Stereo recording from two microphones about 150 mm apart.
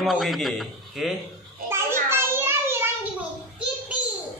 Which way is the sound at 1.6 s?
15° right (ahead or behind).